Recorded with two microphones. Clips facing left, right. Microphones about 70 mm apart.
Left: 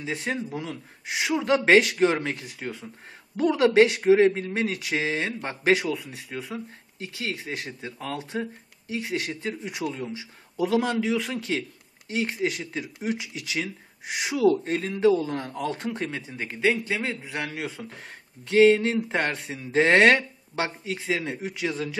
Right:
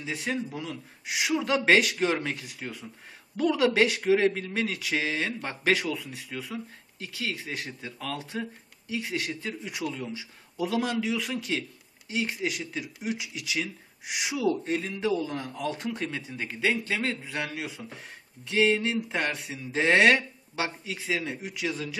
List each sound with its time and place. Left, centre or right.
0.0 s speech: left
10.6 s speech: left
18.5 s speech: left